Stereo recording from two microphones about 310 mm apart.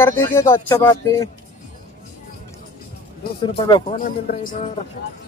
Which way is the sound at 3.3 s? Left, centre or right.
Centre.